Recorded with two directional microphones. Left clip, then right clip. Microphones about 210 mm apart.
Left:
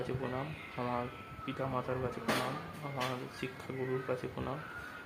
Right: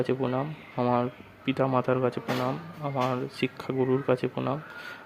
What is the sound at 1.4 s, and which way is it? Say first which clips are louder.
Speech: right 12 dB; 50° right (ahead or behind).